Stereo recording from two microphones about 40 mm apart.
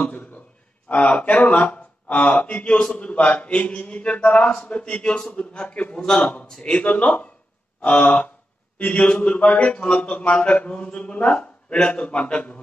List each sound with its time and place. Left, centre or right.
0.0 s a man's voice: left
5.7 s a man's voice: left
5.9 s a man's voice: centre
6.6 s a man's voice: left